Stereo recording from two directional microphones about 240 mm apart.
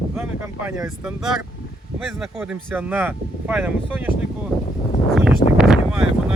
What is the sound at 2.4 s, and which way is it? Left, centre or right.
Speech, centre.